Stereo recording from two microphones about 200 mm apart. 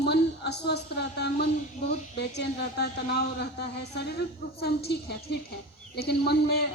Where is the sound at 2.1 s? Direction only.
55° left (ahead or behind).